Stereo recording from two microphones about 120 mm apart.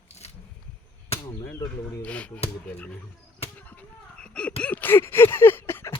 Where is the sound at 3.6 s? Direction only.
10° left (ahead or behind).